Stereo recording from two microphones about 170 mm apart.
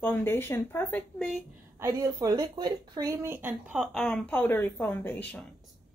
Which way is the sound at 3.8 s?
Centre (ahead or behind).